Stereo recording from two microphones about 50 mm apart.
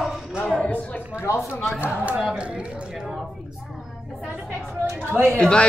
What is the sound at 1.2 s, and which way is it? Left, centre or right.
Speech, left.